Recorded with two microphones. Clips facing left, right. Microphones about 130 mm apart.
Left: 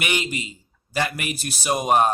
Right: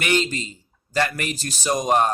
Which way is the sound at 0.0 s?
15° left (ahead or behind).